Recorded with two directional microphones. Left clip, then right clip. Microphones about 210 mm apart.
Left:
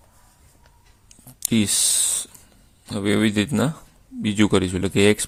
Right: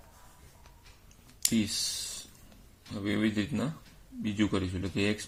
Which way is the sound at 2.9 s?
50° left (ahead or behind).